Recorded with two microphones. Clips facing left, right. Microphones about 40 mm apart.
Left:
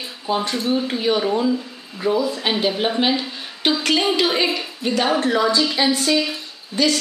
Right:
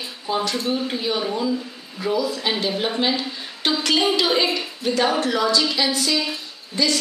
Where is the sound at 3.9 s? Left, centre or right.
Centre.